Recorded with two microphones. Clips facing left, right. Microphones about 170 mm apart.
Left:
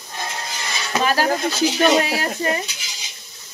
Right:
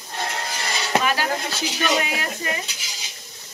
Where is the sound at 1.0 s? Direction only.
40° left (ahead or behind).